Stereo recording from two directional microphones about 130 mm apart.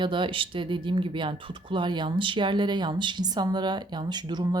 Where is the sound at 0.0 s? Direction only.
40° right (ahead or behind).